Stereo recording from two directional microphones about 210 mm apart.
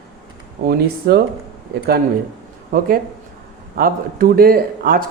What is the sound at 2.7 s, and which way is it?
Speech, 45° right (ahead or behind).